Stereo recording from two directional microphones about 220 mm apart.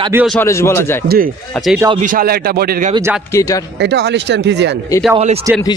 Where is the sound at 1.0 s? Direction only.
45° right (ahead or behind).